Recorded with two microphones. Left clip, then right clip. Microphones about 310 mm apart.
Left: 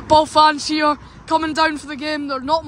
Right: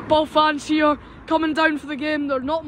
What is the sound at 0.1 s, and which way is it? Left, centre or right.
Speech, centre.